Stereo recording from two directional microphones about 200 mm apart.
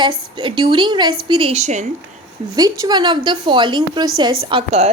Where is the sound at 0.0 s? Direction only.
25° right (ahead or behind).